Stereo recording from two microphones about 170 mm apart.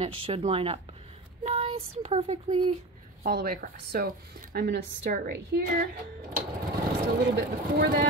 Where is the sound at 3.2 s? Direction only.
60° right (ahead or behind).